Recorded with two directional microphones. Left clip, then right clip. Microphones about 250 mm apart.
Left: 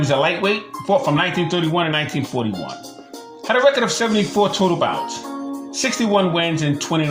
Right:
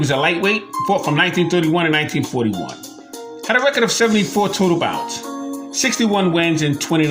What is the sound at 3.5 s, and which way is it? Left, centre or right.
Speech, right.